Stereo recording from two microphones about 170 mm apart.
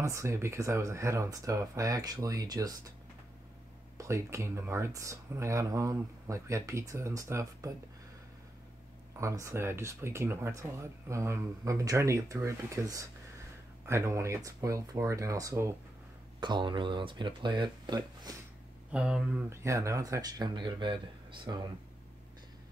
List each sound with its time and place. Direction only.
0.0 s speech: 15° right (ahead or behind)
4.0 s speech: 15° right (ahead or behind)
9.2 s speech: 15° right (ahead or behind)
18.9 s speech: 5° right (ahead or behind)
19.5 s speech: 15° right (ahead or behind)